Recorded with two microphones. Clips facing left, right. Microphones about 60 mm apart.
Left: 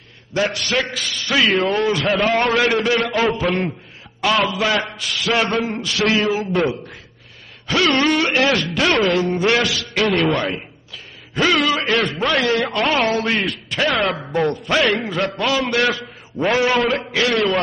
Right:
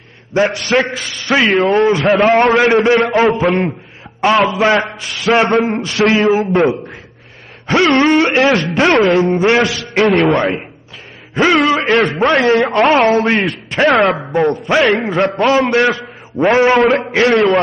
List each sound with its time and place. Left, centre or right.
0.3 s a man's voice: right
14.1 s a man's voice: right